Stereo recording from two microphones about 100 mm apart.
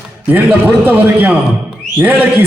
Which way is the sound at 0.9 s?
15° right (ahead or behind).